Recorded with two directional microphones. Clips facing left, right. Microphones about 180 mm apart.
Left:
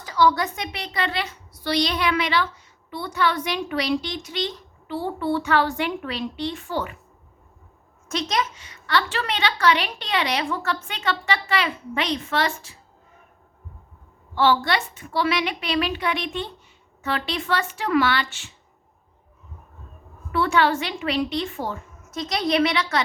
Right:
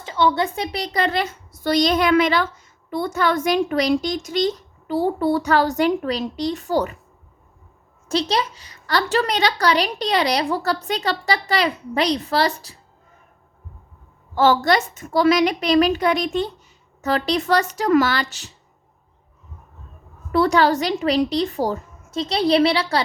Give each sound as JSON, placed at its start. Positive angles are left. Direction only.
{"t": 0.0, "sound": "a woman's voice", "side_deg": -25}
{"t": 8.0, "sound": "a woman's voice", "side_deg": -30}
{"t": 14.3, "sound": "a woman's voice", "side_deg": -45}
{"t": 20.3, "sound": "a woman's voice", "side_deg": -40}